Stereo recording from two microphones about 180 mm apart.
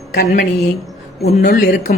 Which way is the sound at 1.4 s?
55° left (ahead or behind).